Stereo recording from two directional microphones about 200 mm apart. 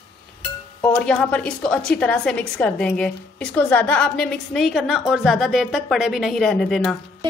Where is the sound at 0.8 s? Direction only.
5° left (ahead or behind).